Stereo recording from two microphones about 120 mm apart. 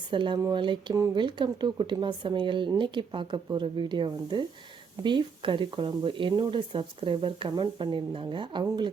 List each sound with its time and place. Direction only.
0.1 s speech: 45° right (ahead or behind)